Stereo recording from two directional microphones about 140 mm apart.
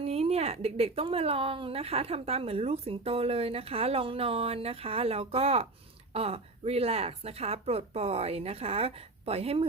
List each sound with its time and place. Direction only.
0.0 s speech: 45° right (ahead or behind)